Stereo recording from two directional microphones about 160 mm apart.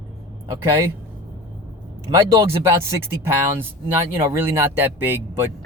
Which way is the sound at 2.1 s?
20° right (ahead or behind).